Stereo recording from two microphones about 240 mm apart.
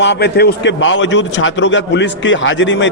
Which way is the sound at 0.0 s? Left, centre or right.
Left.